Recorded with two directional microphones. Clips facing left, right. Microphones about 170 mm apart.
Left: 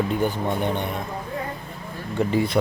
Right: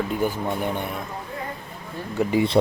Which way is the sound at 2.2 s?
10° right (ahead or behind).